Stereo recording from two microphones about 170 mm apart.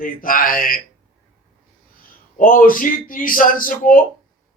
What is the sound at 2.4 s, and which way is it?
A man's voice, 55° left (ahead or behind).